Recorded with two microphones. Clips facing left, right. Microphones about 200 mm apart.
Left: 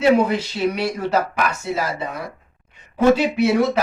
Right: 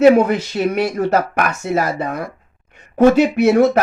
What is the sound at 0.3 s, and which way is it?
Speech, 50° right (ahead or behind).